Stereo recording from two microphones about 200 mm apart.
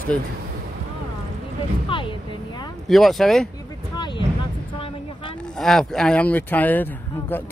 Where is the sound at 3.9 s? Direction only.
20° left (ahead or behind).